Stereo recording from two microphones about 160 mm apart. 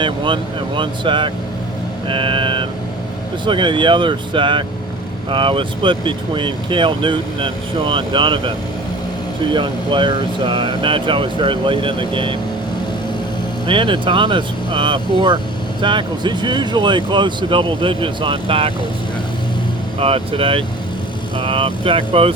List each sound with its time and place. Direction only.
0.8 s speech: 30° right (ahead or behind)
2.0 s a sound: 30° right (ahead or behind)
3.4 s speech: 30° right (ahead or behind)
13.7 s speech: 30° right (ahead or behind)
20.0 s speech: 35° right (ahead or behind)